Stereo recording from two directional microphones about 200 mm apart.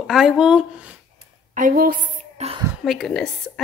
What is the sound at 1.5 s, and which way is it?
Speech, 45° right (ahead or behind).